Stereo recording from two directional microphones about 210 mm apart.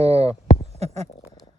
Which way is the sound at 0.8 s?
30° right (ahead or behind).